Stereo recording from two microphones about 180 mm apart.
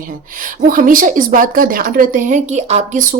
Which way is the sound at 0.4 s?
50° right (ahead or behind).